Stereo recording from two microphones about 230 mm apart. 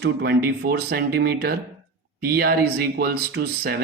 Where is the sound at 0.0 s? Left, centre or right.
Right.